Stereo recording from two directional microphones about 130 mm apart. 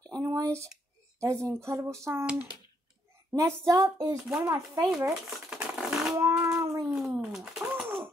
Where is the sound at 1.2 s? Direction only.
25° right (ahead or behind).